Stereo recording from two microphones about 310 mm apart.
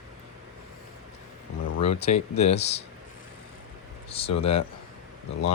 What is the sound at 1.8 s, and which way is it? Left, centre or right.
Speech, left.